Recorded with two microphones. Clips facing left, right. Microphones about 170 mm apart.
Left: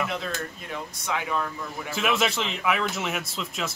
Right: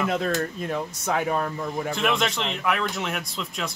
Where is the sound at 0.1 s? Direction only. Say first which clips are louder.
Right 7 dB; 45° right (ahead or behind).